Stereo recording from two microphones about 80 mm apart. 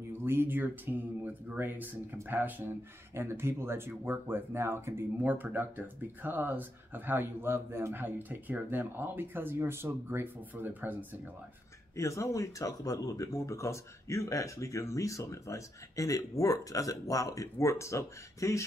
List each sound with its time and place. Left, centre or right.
0.2 s speech: right
12.0 s speech: left